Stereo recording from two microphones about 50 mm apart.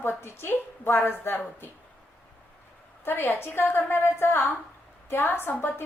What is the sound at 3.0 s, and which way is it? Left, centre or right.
A woman's voice, left.